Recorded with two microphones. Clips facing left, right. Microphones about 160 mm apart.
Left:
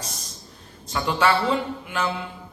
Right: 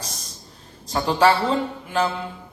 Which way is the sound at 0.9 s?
35° right (ahead or behind).